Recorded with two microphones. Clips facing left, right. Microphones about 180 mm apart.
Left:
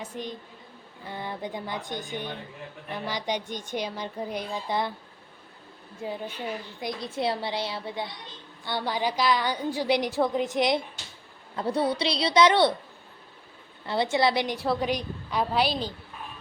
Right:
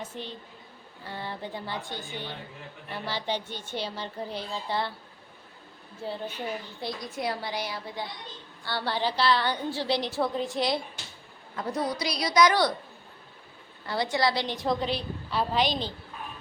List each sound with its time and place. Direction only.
0.0 s a woman's voice: 10° left (ahead or behind)
6.0 s a woman's voice: 15° left (ahead or behind)
7.0 s a woman's voice: 30° left (ahead or behind)
11.5 s a woman's voice: 30° left (ahead or behind)
13.8 s a woman's voice: 20° left (ahead or behind)
14.5 s a woman's voice: 10° left (ahead or behind)